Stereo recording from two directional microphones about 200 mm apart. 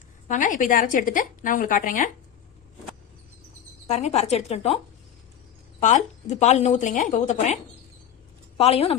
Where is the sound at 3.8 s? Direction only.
30° left (ahead or behind).